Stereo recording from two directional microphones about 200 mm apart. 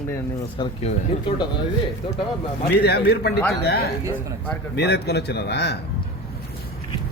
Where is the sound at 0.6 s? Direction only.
30° left (ahead or behind).